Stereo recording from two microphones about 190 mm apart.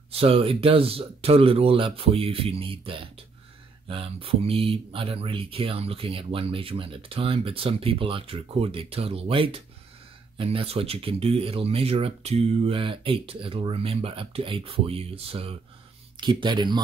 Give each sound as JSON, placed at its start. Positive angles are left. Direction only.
{"t": 0.1, "sound": "speech", "side_deg": -30}